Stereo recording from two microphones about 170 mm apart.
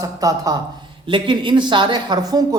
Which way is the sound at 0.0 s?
20° right (ahead or behind).